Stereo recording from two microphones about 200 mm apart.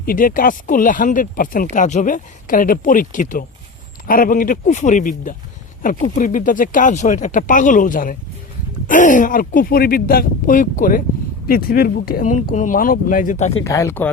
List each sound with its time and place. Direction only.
0.0 s speech: 45° left (ahead or behind)
13.7 s speech: 15° left (ahead or behind)